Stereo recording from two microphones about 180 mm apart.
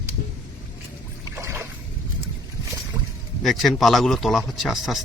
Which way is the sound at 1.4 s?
15° right (ahead or behind).